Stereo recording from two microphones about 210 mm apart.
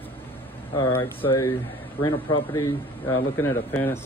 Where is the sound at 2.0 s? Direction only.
25° left (ahead or behind).